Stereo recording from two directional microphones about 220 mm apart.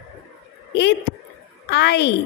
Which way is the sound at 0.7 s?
50° left (ahead or behind).